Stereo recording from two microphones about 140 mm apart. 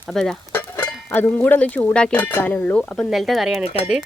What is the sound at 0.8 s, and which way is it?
Speech, 15° left (ahead or behind).